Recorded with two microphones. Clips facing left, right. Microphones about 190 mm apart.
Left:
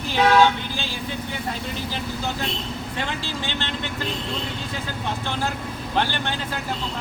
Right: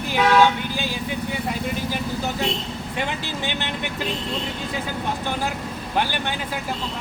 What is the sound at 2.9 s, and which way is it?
Speech, 15° right (ahead or behind).